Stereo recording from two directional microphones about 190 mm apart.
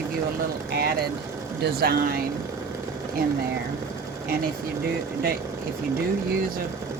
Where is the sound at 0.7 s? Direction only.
60° right (ahead or behind).